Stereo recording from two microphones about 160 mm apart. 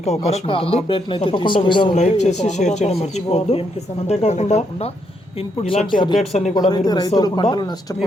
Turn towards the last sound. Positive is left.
turn(degrees=25)  # may be behind; listen again after turning